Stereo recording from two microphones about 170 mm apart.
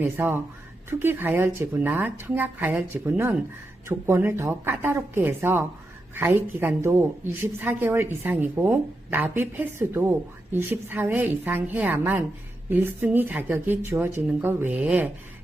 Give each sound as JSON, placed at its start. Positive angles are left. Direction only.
{"t": 0.0, "sound": "a woman's voice", "side_deg": -15}